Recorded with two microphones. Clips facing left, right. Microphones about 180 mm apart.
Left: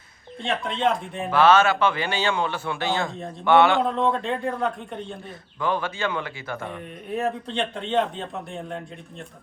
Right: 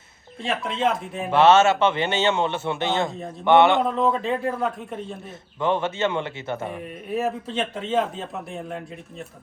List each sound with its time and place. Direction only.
0.4 s speech: centre (ahead or behind)
1.3 s a man's voice: 25° right (ahead or behind)
3.8 s speech: centre (ahead or behind)
5.5 s a man's voice: 25° right (ahead or behind)
6.7 s speech: 5° right (ahead or behind)